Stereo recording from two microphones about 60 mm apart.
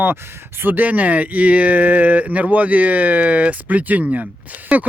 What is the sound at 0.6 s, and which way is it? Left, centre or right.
Speech, right.